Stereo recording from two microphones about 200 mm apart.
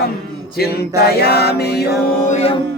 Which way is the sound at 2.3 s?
30° left (ahead or behind).